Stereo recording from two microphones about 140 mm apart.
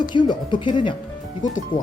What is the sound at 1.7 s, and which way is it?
Speech, 70° left (ahead or behind).